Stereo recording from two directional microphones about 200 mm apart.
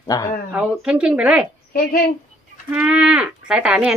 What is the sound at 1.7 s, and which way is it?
Speech, 50° left (ahead or behind).